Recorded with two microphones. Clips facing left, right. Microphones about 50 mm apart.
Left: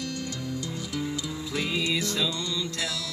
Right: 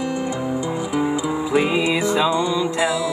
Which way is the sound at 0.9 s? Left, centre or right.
Right.